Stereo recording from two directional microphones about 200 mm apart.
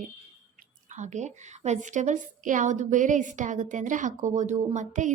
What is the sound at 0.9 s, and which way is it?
A woman's voice, 35° right (ahead or behind).